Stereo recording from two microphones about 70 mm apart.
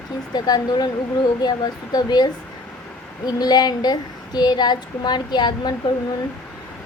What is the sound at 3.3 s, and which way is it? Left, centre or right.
A woman's voice, left.